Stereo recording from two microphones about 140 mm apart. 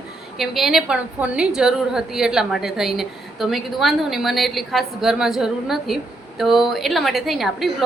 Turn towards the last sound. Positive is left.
turn(degrees=0)  # may be behind; listen again after turning